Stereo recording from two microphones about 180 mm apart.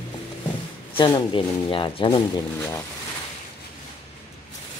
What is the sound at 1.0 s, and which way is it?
Speech, 25° left (ahead or behind).